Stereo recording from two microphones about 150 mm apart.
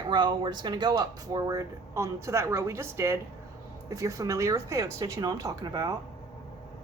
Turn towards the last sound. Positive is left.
turn(degrees=-25)  # may be behind; listen again after turning